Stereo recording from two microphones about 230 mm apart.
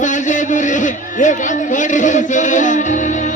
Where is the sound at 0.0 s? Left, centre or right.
Left.